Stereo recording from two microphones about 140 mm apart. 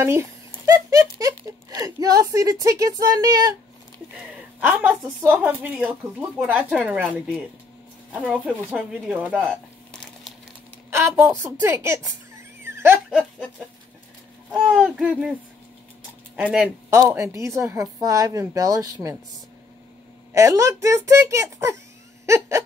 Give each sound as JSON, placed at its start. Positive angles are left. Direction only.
{"t": 0.0, "sound": "a sound", "side_deg": -20}
{"t": 1.2, "sound": "speech", "side_deg": -25}
{"t": 4.6, "sound": "speech", "side_deg": -10}
{"t": 10.9, "sound": "speech", "side_deg": -20}
{"t": 14.5, "sound": "speech", "side_deg": -5}
{"t": 16.3, "sound": "speech", "side_deg": 0}
{"t": 16.9, "sound": "speech", "side_deg": -20}
{"t": 20.3, "sound": "speech", "side_deg": -20}
{"t": 22.2, "sound": "hiccup", "side_deg": -20}